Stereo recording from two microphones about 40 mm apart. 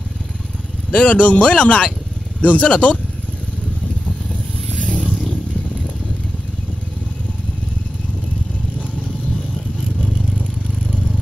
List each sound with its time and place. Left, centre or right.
0.9 s speech: left
4.7 s vehicle: centre